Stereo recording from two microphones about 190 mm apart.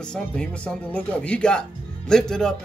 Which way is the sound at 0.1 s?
5° left (ahead or behind).